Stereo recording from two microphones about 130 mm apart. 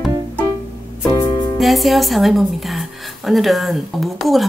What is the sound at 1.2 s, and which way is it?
Music, 30° left (ahead or behind).